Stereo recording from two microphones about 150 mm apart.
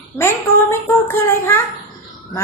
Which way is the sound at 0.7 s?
15° left (ahead or behind).